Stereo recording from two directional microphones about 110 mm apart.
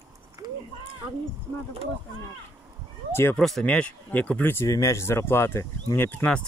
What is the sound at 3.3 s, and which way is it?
Speech, 5° left (ahead or behind).